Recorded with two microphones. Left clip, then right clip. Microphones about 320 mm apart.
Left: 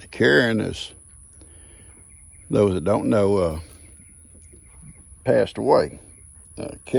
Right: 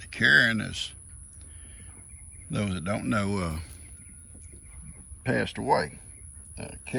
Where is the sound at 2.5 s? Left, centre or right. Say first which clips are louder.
Left 13 dB; centre.